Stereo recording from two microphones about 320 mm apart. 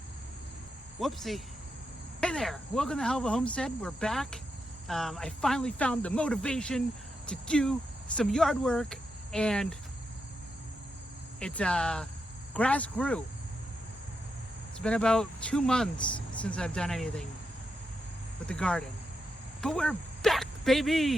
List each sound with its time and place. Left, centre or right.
0.9 s speech: centre
11.3 s speech: centre
14.8 s speech: centre
18.4 s speech: centre